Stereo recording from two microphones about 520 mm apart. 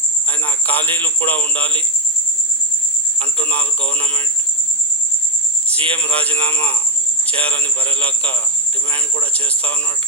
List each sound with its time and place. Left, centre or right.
0.7 s speech: centre
3.4 s speech: centre
5.6 s speech: centre